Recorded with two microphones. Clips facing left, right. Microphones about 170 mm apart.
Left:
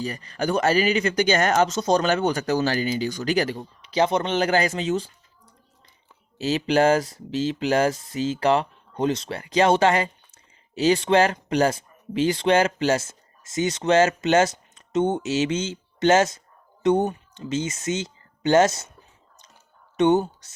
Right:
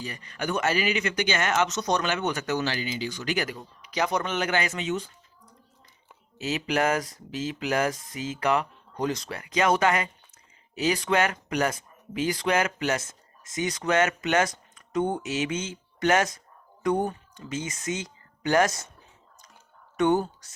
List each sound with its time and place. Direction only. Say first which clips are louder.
0.0 s speech: left 6 dB; 35° left (ahead or behind)
2.7 s speech: left 7 dB; 45° left (ahead or behind)
6.4 s speech: left 6 dB; 30° left (ahead or behind)
20.0 s speech: left 4 dB; 20° left (ahead or behind)